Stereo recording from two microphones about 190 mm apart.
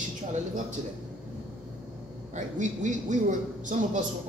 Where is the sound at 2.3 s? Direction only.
40° right (ahead or behind).